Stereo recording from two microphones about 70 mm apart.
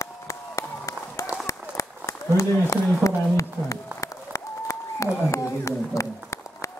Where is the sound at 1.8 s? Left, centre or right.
Left.